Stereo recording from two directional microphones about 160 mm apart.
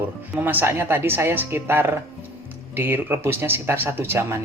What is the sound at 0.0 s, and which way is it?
Speech, 10° right (ahead or behind).